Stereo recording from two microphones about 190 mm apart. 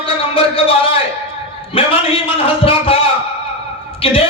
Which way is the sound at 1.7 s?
30° left (ahead or behind).